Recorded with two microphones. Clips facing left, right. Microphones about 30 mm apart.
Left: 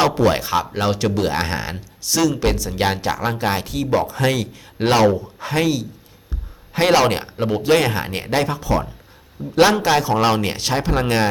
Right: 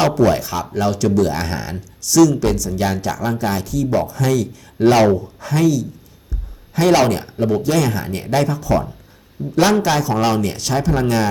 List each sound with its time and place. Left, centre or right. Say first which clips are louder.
0.3 s speech: even; left
9.6 s a man's voice: even; centre
10.4 s speech: right 1 dB; left